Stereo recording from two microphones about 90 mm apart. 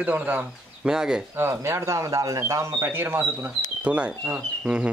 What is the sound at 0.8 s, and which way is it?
Speech, 5° right (ahead or behind).